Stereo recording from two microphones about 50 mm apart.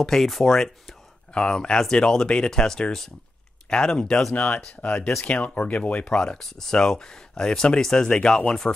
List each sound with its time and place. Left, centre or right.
0.0 s speech: centre
1.3 s speech: centre